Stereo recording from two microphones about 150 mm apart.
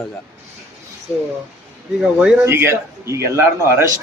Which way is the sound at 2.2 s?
10° right (ahead or behind).